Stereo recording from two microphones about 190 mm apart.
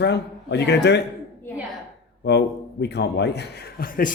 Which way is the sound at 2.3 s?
60° left (ahead or behind).